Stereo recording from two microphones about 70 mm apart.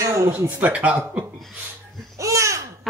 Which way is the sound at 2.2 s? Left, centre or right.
Right.